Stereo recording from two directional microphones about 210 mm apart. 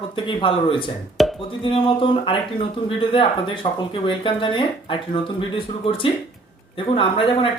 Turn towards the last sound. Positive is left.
turn(degrees=25)  # may be behind; listen again after turning